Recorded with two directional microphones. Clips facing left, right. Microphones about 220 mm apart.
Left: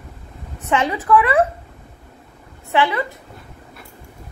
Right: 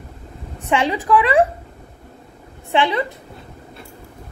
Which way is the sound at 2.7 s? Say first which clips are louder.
Right 1 dB; 15° right (ahead or behind).